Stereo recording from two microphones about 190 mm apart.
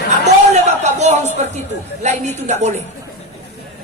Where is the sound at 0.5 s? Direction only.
35° right (ahead or behind).